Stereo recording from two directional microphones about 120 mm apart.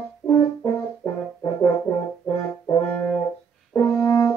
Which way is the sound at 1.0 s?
30° left (ahead or behind).